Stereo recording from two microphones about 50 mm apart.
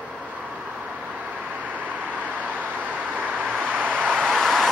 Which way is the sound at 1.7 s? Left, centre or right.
Right.